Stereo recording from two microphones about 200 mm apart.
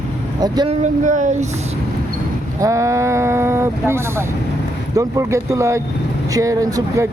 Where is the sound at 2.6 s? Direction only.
15° right (ahead or behind).